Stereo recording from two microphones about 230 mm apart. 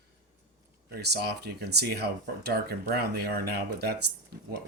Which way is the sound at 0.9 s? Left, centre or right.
Right.